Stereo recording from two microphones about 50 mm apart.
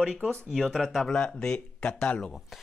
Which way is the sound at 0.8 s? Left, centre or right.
Centre.